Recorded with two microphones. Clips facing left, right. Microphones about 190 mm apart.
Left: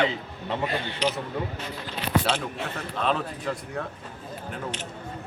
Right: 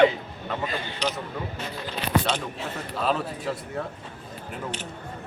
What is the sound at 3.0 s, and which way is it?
Speech, 5° right (ahead or behind).